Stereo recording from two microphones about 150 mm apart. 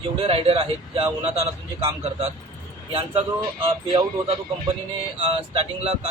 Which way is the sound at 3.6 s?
35° right (ahead or behind).